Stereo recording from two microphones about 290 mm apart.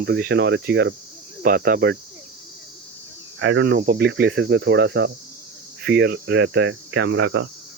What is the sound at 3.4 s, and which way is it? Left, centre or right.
Speech, right.